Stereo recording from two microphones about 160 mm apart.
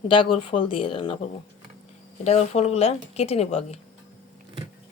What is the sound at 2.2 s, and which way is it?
A woman's voice, 45° left (ahead or behind).